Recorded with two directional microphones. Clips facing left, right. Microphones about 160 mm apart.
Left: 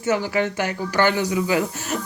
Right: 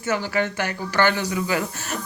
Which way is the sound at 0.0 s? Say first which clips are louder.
Left 2 dB; 15° left (ahead or behind).